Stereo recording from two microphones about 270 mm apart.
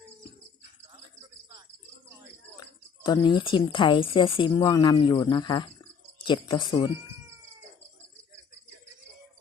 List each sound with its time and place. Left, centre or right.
2.6 s speech: centre